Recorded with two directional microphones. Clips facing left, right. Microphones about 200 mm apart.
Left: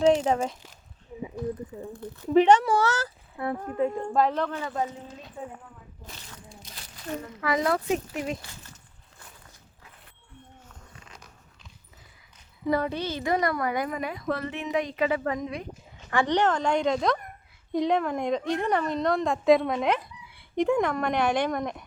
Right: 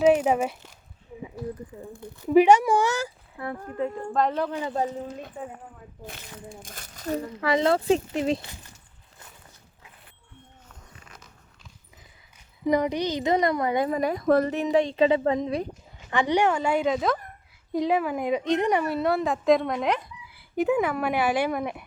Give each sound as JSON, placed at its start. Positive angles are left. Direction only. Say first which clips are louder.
{"t": 0.0, "sound": "speech", "louder": "right 2 dB", "side_deg": -10}
{"t": 2.2, "sound": "speech", "louder": "right 2 dB", "side_deg": -10}
{"t": 3.4, "sound": "speech", "louder": "left 3 dB", "side_deg": 20}
{"t": 4.2, "sound": "speech", "louder": "even", "side_deg": -5}
{"t": 6.1, "sound": "speech", "louder": "right 7 dB", "side_deg": -50}
{"t": 12.6, "sound": "a woman's voice", "louder": "right 3 dB", "side_deg": -15}
{"t": 16.0, "sound": "speech", "louder": "right 1 dB", "side_deg": -15}
{"t": 18.4, "sound": "speech", "louder": "right 3 dB", "side_deg": -20}